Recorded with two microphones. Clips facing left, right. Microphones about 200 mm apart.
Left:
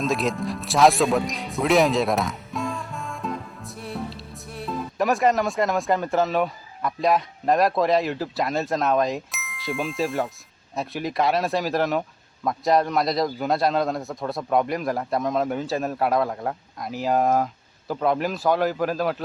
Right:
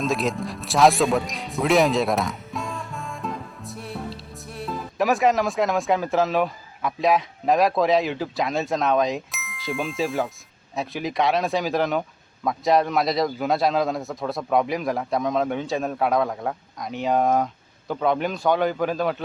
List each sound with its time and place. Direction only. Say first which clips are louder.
0.0 s a man's voice: even; centre (ahead or behind)